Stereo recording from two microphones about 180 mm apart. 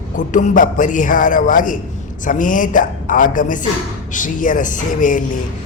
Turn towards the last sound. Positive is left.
turn(degrees=45)  # may be behind; listen again after turning